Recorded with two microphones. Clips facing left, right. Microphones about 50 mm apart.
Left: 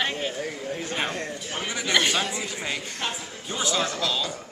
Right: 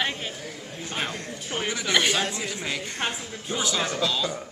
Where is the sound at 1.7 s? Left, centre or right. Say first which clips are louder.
Even; centre.